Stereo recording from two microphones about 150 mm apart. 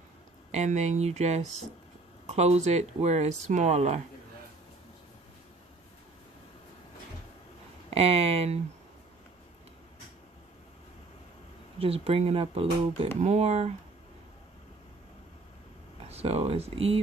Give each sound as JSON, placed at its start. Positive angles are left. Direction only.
{"t": 0.5, "sound": "speech", "side_deg": -50}
{"t": 7.9, "sound": "speech", "side_deg": -40}
{"t": 11.8, "sound": "speech", "side_deg": -40}
{"t": 16.1, "sound": "speech", "side_deg": -40}